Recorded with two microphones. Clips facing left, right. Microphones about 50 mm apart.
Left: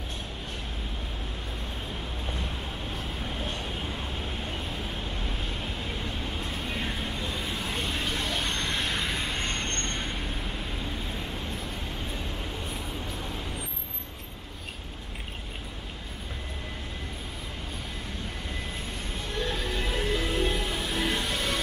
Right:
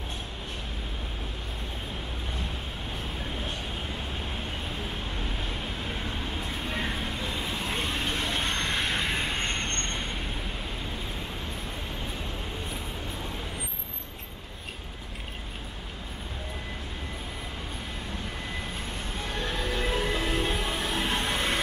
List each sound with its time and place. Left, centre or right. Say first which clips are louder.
6.7 s vehicle: right 2 dB; right
9.8 s vehicle: even; centre
19.4 s music: right 1 dB; right
20.8 s music: right 1 dB; right